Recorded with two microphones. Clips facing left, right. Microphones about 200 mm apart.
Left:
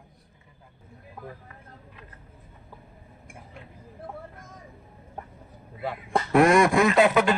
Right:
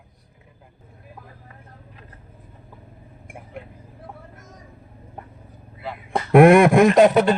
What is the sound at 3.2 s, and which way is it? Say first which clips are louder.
Vehicle: right 9 dB; 60° right (ahead or behind).